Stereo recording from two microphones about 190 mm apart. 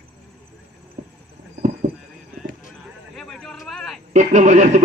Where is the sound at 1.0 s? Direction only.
40° right (ahead or behind).